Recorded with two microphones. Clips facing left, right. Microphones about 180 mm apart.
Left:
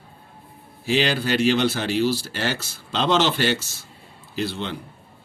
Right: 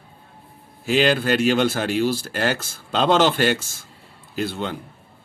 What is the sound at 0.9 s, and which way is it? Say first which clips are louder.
Speech: right 3 dB; 50° right (ahead or behind).